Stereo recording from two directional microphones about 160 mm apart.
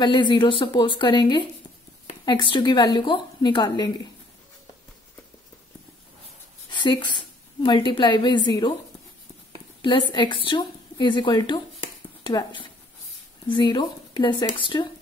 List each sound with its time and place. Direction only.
0.0 s a woman's voice: 30° left (ahead or behind)
6.7 s a woman's voice: 30° left (ahead or behind)
9.8 s a woman's voice: 30° left (ahead or behind)